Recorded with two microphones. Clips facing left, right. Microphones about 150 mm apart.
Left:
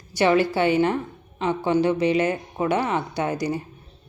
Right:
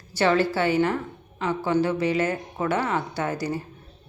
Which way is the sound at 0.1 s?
15° left (ahead or behind).